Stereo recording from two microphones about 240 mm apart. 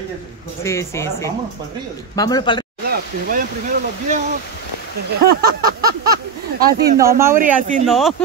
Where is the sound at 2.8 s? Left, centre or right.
Right.